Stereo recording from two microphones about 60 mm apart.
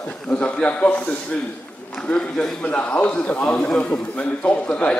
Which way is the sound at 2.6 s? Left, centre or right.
Left.